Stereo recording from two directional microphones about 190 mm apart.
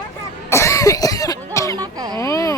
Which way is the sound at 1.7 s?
20° right (ahead or behind).